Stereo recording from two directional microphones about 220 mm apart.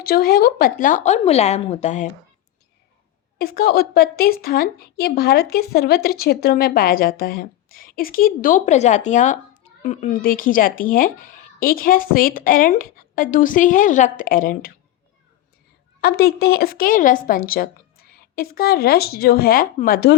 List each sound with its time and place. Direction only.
0.0 s a woman's voice: 40° left (ahead or behind)
3.3 s a woman's voice: 45° left (ahead or behind)
16.0 s a woman's voice: 45° left (ahead or behind)